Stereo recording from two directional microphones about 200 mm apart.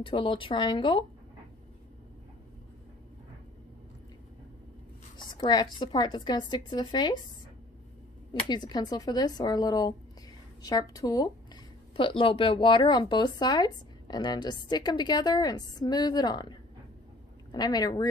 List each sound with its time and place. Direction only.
0.0 s speech: 25° left (ahead or behind)
5.1 s speech: 20° left (ahead or behind)
8.3 s speech: 20° left (ahead or behind)